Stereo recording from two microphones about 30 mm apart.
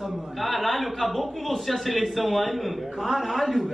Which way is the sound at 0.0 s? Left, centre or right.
Centre.